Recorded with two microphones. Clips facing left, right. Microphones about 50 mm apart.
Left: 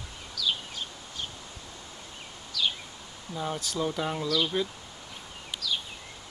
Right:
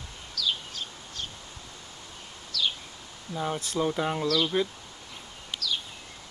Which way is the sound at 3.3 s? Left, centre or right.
Centre.